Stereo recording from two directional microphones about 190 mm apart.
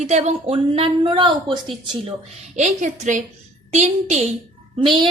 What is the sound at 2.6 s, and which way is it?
A woman's voice, 40° right (ahead or behind).